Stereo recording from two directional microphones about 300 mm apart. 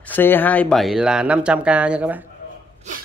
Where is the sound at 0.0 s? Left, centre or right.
Centre.